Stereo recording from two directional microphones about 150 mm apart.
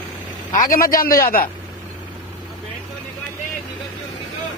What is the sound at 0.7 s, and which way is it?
Speech, 70° left (ahead or behind).